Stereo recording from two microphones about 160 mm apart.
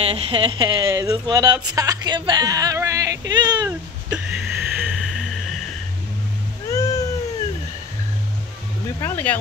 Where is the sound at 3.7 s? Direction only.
5° right (ahead or behind).